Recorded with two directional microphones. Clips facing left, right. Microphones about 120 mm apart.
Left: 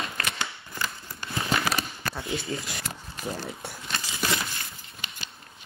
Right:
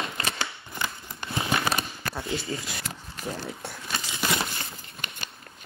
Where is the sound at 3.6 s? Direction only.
Centre (ahead or behind).